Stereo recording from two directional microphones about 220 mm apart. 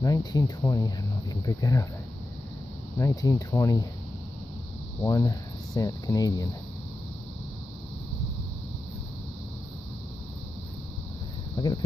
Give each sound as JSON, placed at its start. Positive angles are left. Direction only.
{"t": 0.0, "sound": "speech", "side_deg": 15}
{"t": 3.0, "sound": "speech", "side_deg": 15}
{"t": 5.0, "sound": "speech", "side_deg": 15}
{"t": 11.5, "sound": "a sound", "side_deg": 20}